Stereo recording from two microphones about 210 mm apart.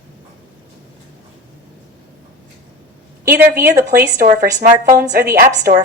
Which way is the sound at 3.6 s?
50° right (ahead or behind).